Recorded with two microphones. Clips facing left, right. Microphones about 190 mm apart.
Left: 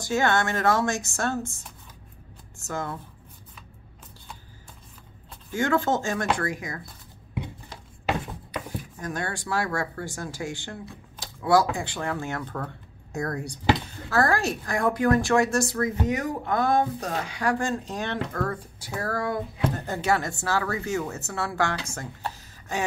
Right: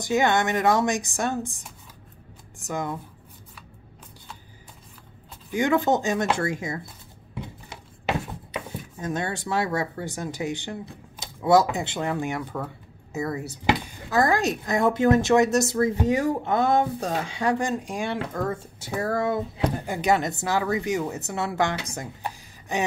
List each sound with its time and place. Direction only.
0.0 s speech: 15° right (ahead or behind)
5.5 s speech: 15° right (ahead or behind)
9.0 s speech: 20° right (ahead or behind); by 13.6 s 5° right (ahead or behind)
13.7 s speech: 15° right (ahead or behind)